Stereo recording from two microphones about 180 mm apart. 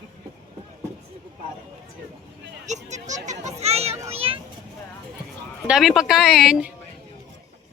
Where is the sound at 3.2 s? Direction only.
40° right (ahead or behind).